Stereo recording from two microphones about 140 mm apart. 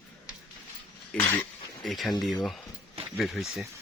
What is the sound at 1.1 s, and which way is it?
Cutlery, 15° left (ahead or behind).